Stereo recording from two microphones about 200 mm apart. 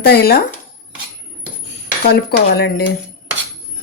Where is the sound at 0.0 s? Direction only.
50° left (ahead or behind).